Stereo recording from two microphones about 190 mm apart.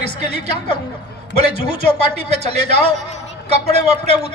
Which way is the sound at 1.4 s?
35° right (ahead or behind).